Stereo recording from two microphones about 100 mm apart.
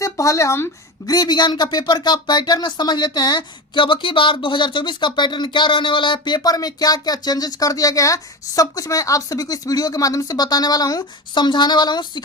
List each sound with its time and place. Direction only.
0.0 s speech: 30° left (ahead or behind)
1.0 s speech: 40° left (ahead or behind)